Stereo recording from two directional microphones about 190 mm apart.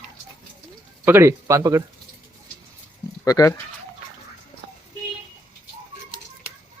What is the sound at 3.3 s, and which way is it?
Speech, 15° left (ahead or behind).